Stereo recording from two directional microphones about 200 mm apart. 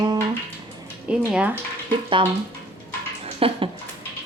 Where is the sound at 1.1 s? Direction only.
5° right (ahead or behind).